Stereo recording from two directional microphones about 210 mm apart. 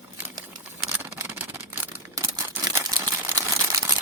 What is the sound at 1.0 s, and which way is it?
Camera, 10° right (ahead or behind).